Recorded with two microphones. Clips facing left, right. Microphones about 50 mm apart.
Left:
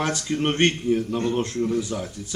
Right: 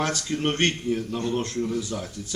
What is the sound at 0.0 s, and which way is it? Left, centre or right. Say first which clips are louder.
Speech: left 2 dB; centre.